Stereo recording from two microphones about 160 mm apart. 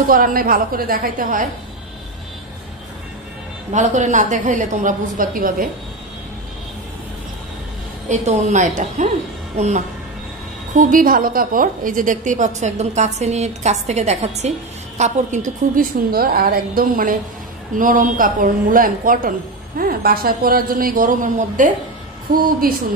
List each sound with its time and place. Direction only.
0.1 s a woman's voice: 60° right (ahead or behind)
3.7 s a woman's voice: 50° right (ahead or behind)
8.1 s a woman's voice: 45° right (ahead or behind)
10.8 s a woman's voice: 55° right (ahead or behind)